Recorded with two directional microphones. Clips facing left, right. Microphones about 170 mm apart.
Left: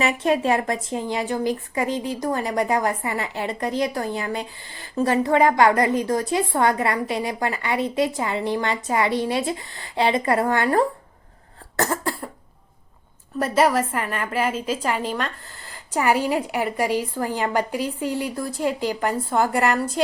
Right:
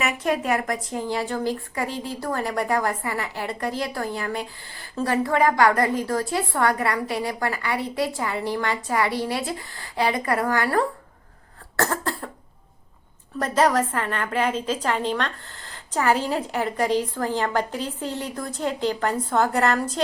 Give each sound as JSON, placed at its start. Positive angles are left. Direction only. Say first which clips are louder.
{"t": 0.0, "sound": "a woman's voice", "louder": "left 4 dB", "side_deg": 25}
{"t": 13.4, "sound": "a woman's voice", "louder": "left 1 dB", "side_deg": 10}